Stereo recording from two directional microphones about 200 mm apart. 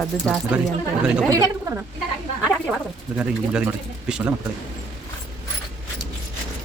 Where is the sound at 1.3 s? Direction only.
15° right (ahead or behind).